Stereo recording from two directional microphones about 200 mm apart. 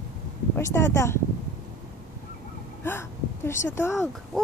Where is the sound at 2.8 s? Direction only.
10° left (ahead or behind).